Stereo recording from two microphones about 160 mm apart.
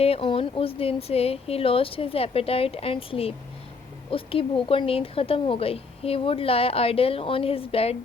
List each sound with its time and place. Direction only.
0.0 s a woman's voice: 35° left (ahead or behind)